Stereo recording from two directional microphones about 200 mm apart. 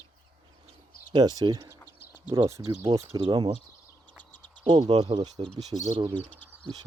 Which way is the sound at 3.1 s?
25° right (ahead or behind).